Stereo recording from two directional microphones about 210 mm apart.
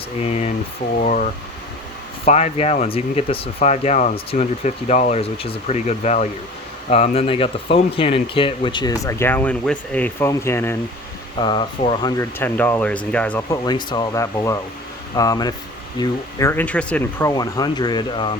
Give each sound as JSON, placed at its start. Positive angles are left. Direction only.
{"t": 0.2, "sound": "speech", "side_deg": 30}
{"t": 11.3, "sound": "speech", "side_deg": 20}
{"t": 13.7, "sound": "speech", "side_deg": 20}